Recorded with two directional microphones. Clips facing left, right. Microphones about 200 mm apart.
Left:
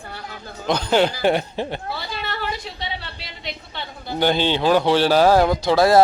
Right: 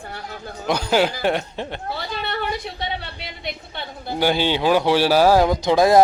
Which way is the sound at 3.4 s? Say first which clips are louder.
Right 1 dB; 50° right (ahead or behind).